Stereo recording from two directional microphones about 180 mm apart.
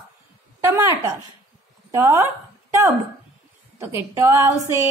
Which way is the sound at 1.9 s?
15° right (ahead or behind).